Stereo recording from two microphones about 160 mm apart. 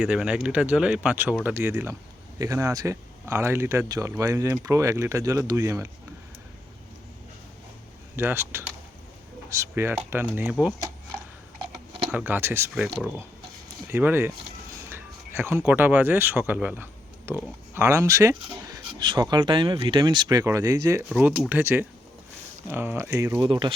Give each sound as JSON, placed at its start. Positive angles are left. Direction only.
{"t": 0.0, "sound": "speech", "side_deg": -5}
{"t": 8.1, "sound": "speech", "side_deg": -15}
{"t": 12.1, "sound": "speech", "side_deg": -15}
{"t": 13.9, "sound": "speech", "side_deg": -15}
{"t": 21.1, "sound": "speech", "side_deg": -10}
{"t": 23.4, "sound": "speech", "side_deg": -30}